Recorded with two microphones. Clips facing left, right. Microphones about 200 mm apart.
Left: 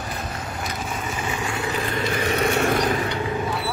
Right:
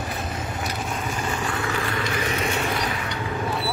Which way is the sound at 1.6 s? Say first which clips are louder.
Left 2 dB; 25° left (ahead or behind).